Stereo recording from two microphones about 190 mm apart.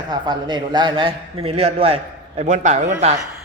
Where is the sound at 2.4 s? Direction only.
40° right (ahead or behind).